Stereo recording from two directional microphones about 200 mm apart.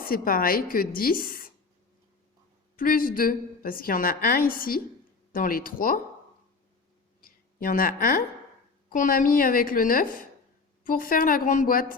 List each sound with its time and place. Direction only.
0.0 s a woman's voice: 45° left (ahead or behind)
2.7 s a woman's voice: 45° left (ahead or behind)
7.2 s a sound: 45° left (ahead or behind)
8.9 s a woman's voice: 40° left (ahead or behind)